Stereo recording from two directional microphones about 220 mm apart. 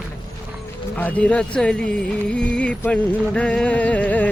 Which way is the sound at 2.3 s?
5° left (ahead or behind).